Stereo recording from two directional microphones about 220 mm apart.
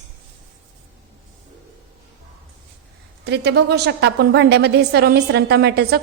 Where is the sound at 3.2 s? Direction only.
50° right (ahead or behind).